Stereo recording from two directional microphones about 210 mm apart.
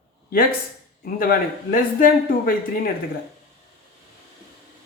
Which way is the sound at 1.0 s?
45° left (ahead or behind).